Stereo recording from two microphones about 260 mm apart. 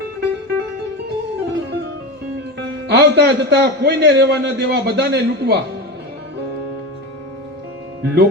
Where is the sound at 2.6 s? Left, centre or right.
Right.